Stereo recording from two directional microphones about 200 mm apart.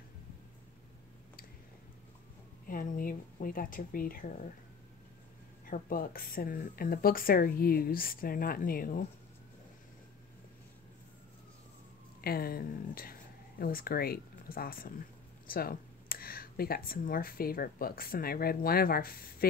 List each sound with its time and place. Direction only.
2.7 s speech: 45° left (ahead or behind)
5.7 s speech: 45° left (ahead or behind)
12.2 s speech: 50° left (ahead or behind)